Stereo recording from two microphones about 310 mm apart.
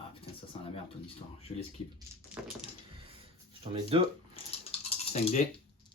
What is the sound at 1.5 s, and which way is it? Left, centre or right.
Speech, left.